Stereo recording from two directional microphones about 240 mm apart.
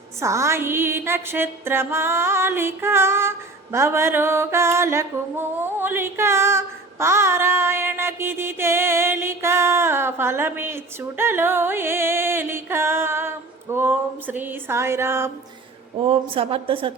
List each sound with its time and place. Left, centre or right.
0.2 s music: centre
16.0 s a woman's voice: right